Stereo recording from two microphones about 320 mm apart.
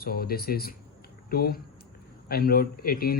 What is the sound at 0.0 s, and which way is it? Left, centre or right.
Speech, left.